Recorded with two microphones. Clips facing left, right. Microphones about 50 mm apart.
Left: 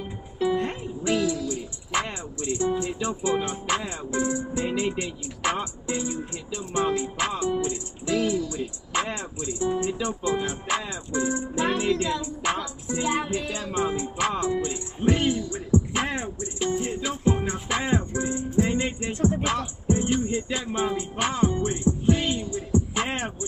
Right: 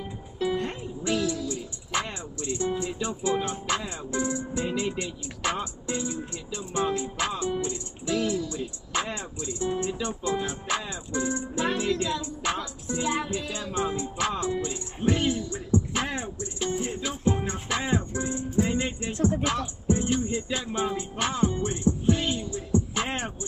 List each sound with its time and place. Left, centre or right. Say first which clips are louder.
0.4 s music: left 3 dB; left